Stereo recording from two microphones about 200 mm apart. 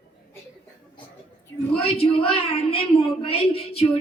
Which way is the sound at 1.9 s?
30° left (ahead or behind).